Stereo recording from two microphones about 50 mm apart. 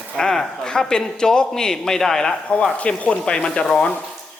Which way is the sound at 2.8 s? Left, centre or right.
Left.